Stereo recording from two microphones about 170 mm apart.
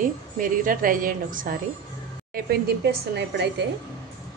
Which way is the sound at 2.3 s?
80° right.